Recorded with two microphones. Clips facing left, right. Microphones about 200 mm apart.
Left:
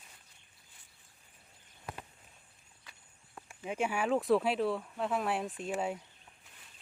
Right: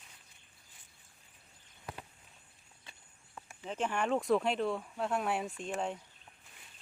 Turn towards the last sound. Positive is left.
turn(degrees=5)  # may be behind; listen again after turning